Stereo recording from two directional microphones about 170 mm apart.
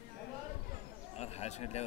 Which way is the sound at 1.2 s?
40° left (ahead or behind).